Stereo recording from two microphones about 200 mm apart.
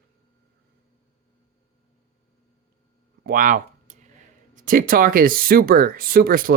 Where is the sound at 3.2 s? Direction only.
45° right (ahead or behind).